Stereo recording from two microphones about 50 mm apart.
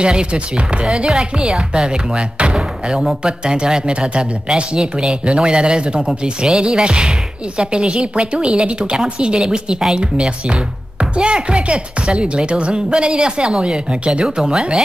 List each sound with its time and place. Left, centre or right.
0.0 s speech: centre